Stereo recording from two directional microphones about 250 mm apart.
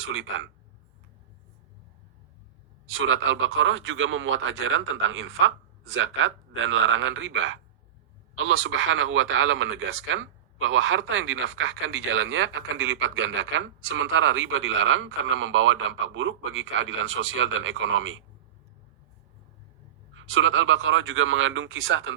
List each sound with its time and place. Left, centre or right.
0.0 s speech: right
2.9 s speech: right
20.2 s speech: right